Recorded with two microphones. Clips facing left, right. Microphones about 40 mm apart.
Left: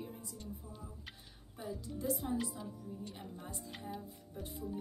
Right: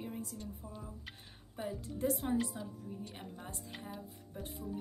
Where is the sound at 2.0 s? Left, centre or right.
Right.